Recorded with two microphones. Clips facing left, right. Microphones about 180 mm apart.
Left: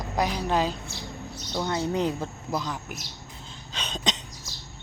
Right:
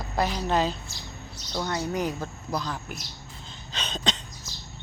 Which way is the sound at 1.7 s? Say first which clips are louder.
Left 3 dB; 25° left (ahead or behind).